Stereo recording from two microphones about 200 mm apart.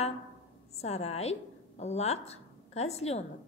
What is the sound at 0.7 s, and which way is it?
A woman's voice, 30° left (ahead or behind).